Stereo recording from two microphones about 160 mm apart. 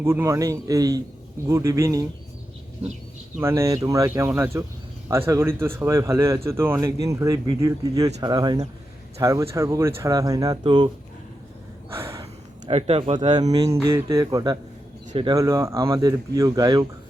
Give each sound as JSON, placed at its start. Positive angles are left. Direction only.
{"t": 0.0, "sound": "speech", "side_deg": -15}
{"t": 3.3, "sound": "speech", "side_deg": -15}
{"t": 11.9, "sound": "a sound", "side_deg": -15}
{"t": 12.2, "sound": "a sound", "side_deg": -40}
{"t": 13.5, "sound": "speech", "side_deg": -20}
{"t": 15.4, "sound": "speech", "side_deg": -20}